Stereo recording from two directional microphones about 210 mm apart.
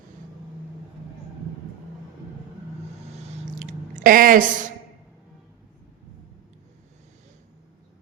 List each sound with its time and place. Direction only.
4.0 s a woman's voice: 40° right (ahead or behind)